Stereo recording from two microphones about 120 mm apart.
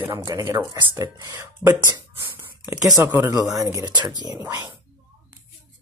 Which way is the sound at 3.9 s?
40° right (ahead or behind).